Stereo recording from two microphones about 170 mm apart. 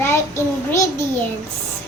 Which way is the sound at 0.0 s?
15° left (ahead or behind).